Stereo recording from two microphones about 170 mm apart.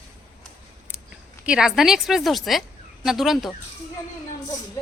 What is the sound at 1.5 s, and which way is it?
Speech, 5° right (ahead or behind).